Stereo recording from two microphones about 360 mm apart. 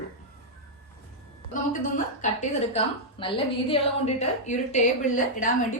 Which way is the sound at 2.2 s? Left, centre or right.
Centre.